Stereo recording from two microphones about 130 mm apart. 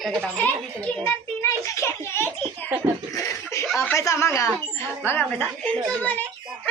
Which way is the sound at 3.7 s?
20° left (ahead or behind).